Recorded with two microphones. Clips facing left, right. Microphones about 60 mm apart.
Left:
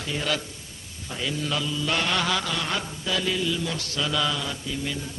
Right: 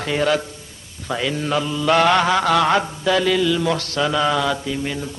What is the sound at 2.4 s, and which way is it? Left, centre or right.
Mantra, right.